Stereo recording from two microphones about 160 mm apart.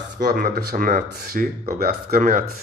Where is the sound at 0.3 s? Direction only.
75° right (ahead or behind).